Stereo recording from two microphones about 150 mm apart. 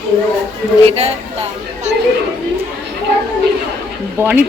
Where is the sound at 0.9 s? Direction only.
45° right (ahead or behind).